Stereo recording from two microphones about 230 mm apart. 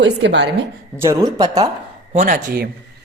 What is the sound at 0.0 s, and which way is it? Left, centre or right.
Speech, right.